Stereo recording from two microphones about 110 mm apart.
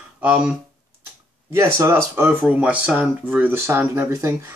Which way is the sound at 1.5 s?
25° right (ahead or behind).